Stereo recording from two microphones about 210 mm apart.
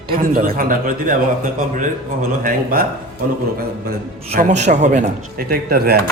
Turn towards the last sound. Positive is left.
turn(degrees=-50)  # may be behind; listen again after turning